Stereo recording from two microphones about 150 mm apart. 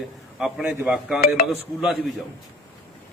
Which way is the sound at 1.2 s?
45° left (ahead or behind).